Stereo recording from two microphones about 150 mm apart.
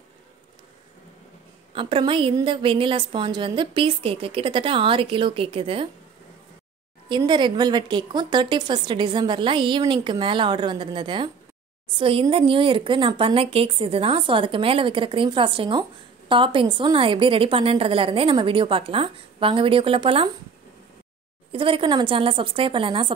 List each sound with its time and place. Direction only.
1.8 s a woman's voice: 35° right (ahead or behind)
7.1 s a woman's voice: 30° right (ahead or behind)
21.5 s a woman's voice: 35° right (ahead or behind)